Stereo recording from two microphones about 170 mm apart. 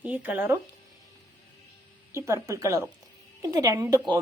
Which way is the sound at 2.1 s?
15° right (ahead or behind).